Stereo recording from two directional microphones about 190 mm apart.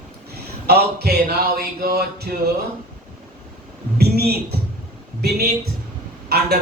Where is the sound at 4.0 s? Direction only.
55° right (ahead or behind).